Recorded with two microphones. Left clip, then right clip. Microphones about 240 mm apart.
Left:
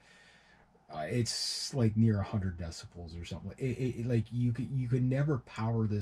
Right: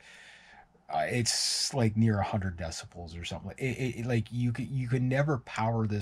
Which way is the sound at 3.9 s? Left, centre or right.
Centre.